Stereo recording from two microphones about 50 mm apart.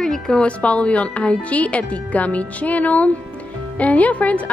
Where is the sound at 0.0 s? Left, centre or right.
Centre.